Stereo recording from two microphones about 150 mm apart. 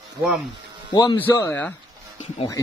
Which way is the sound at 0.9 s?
30° left (ahead or behind).